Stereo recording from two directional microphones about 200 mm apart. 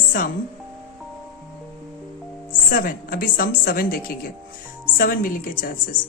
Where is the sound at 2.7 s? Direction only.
45° left (ahead or behind).